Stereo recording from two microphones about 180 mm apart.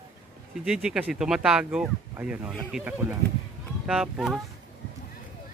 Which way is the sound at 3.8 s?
5° right (ahead or behind).